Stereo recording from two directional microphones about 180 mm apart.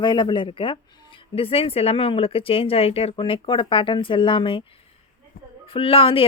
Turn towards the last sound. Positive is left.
turn(degrees=30)  # may be behind; listen again after turning